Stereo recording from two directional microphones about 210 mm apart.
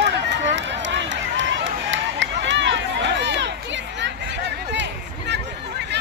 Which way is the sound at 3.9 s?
55° right (ahead or behind).